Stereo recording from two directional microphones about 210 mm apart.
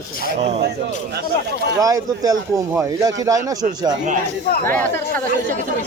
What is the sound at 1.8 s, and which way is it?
Speech, 15° right (ahead or behind).